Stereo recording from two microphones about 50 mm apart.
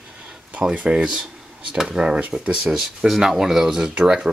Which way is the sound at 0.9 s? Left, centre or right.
Centre.